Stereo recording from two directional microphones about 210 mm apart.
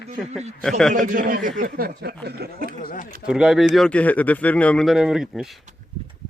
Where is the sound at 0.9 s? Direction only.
40° right (ahead or behind).